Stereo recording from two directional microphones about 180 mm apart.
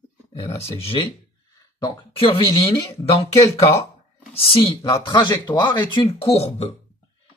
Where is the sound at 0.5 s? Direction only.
35° left (ahead or behind).